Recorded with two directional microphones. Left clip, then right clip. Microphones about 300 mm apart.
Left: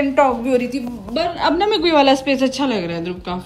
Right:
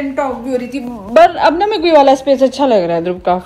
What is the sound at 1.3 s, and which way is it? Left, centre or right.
A woman's voice, centre.